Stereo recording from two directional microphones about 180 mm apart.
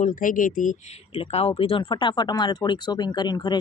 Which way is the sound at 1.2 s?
30° left (ahead or behind).